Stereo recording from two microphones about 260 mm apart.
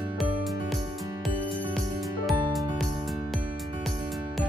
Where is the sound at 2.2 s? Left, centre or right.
Centre.